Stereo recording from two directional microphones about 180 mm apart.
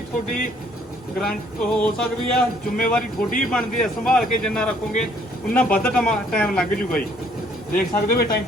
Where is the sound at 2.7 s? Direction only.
50° left (ahead or behind).